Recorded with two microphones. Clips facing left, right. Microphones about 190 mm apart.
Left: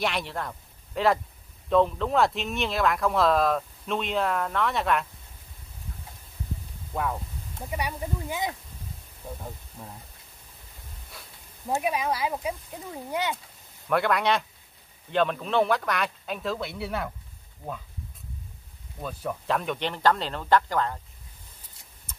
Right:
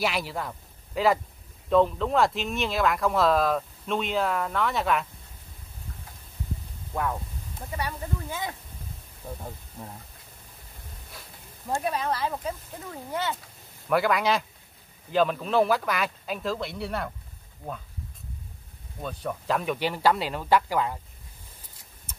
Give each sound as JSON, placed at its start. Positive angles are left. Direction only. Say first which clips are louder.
{"t": 0.0, "sound": "speech", "louder": "right 1 dB", "side_deg": 0}
{"t": 6.9, "sound": "speech", "louder": "even", "side_deg": 5}
{"t": 7.7, "sound": "speech", "louder": "left 1 dB", "side_deg": 15}
{"t": 9.2, "sound": "speech", "louder": "right 1 dB", "side_deg": 5}
{"t": 11.7, "sound": "speech", "louder": "left 1 dB", "side_deg": 10}
{"t": 13.8, "sound": "speech", "louder": "right 1 dB", "side_deg": 0}
{"t": 18.9, "sound": "speech", "louder": "even", "side_deg": 0}